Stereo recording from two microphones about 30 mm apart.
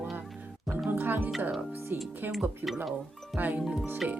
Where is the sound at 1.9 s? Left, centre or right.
Right.